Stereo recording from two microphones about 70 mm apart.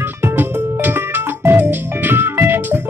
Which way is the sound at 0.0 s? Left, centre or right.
Right.